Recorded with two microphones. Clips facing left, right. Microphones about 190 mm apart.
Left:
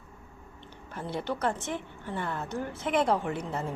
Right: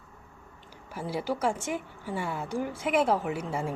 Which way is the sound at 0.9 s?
10° right (ahead or behind).